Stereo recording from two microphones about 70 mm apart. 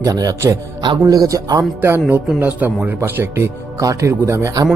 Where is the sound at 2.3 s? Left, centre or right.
Right.